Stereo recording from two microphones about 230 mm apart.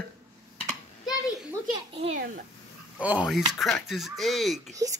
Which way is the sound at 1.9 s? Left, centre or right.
Right.